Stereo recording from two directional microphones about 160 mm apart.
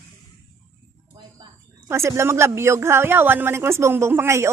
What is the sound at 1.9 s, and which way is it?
Speech, 15° right (ahead or behind).